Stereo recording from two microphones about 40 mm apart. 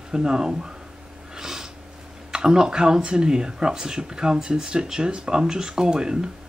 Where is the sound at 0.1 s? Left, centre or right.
Centre.